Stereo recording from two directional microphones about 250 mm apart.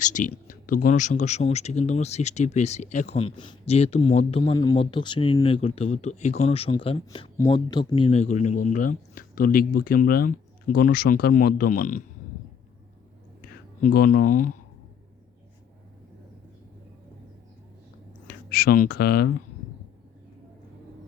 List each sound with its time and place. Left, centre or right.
0.0 s speech: left
13.4 s speech: left
18.3 s speech: left